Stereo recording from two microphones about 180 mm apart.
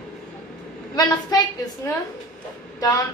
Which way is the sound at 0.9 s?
20° left (ahead or behind).